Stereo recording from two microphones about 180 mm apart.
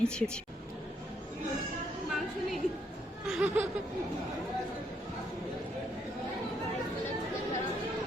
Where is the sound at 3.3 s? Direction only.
5° right (ahead or behind).